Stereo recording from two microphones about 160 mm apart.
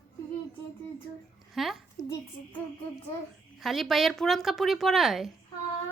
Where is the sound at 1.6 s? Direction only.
Centre (ahead or behind).